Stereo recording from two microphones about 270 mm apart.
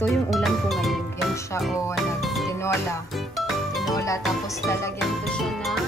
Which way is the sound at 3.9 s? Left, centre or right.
Centre.